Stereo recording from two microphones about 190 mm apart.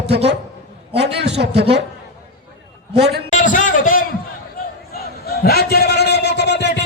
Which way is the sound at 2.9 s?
60° right (ahead or behind).